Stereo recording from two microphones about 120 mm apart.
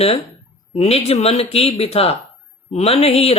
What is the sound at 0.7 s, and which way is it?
Speech, 60° left (ahead or behind).